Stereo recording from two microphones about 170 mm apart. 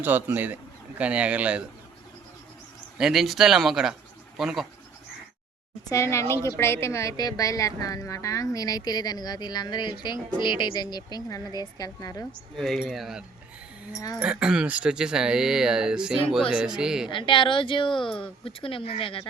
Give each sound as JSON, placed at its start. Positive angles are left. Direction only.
{"t": 0.0, "sound": "a man's voice", "side_deg": -10}
{"t": 3.0, "sound": "speech", "side_deg": 0}
{"t": 5.9, "sound": "a woman's voice", "side_deg": 15}
{"t": 12.5, "sound": "speech", "side_deg": 0}
{"t": 17.1, "sound": "a woman's voice", "side_deg": 30}